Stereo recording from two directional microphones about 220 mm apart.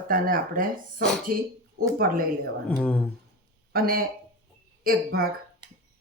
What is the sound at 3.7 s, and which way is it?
Speech, 45° right (ahead or behind).